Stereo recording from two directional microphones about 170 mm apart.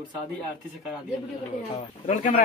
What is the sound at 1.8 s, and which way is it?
Speech, 40° left (ahead or behind).